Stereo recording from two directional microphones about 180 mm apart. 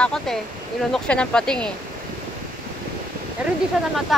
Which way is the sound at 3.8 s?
5° right (ahead or behind).